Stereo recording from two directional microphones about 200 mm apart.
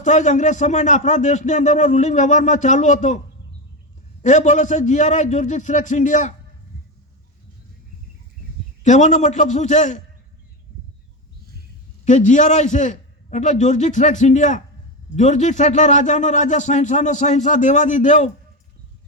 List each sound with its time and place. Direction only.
0.0 s a man's voice: 35° left (ahead or behind)
4.2 s a man's voice: 35° left (ahead or behind)
8.8 s a man's voice: 35° left (ahead or behind)
12.0 s a man's voice: 35° left (ahead or behind)